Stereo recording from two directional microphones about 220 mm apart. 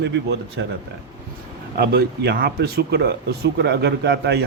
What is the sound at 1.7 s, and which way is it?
Speech, 45° right (ahead or behind).